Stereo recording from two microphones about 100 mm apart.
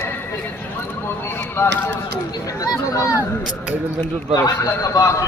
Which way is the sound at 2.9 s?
35° left (ahead or behind).